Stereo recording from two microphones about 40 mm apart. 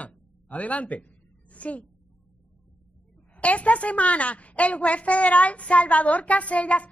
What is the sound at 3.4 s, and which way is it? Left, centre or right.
A woman's voice, left.